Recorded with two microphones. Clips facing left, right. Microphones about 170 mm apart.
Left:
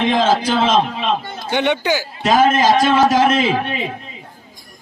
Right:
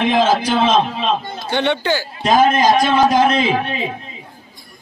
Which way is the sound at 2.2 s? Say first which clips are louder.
Even; 20° right (ahead or behind).